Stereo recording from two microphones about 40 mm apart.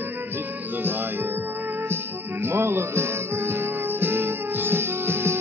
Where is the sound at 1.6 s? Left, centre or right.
Right.